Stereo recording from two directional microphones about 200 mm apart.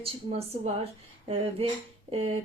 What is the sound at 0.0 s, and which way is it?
Speech, 30° right (ahead or behind).